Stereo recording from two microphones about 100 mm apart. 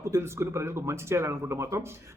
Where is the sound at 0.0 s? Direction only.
25° right (ahead or behind).